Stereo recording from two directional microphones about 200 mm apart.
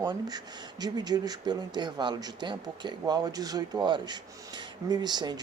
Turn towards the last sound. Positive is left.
turn(degrees=-20)  # may be behind; listen again after turning